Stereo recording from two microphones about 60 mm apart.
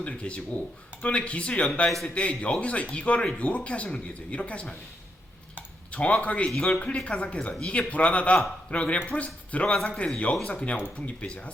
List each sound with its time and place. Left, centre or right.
0.0 s speech: centre
1.9 s a man's voice: centre
2.1 s speech: centre
5.9 s speech: left
10.3 s speech: centre
10.7 s speech: left